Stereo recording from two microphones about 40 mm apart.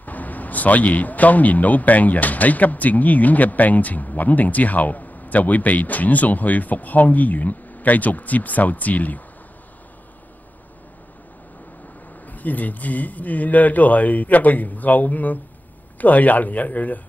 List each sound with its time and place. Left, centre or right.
0.0 s speech: left
12.3 s speech: left